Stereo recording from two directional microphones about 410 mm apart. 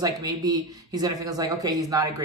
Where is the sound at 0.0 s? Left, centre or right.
Centre.